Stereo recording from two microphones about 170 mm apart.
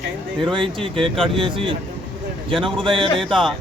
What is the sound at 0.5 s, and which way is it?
Speech, 30° right (ahead or behind).